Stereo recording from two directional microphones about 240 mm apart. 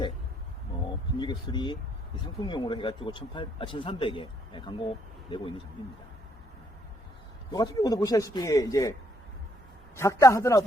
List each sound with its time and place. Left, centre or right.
1.2 s speech: centre
7.5 s a man's voice: centre